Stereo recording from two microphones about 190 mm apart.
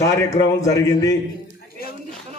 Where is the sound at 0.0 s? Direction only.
15° left (ahead or behind).